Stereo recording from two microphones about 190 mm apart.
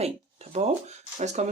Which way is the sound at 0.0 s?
35° right (ahead or behind).